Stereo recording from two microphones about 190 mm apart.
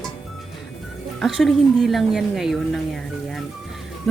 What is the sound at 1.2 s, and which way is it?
Speech, centre (ahead or behind).